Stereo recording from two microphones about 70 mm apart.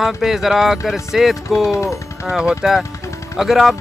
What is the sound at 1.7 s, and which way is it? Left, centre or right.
Speech, left.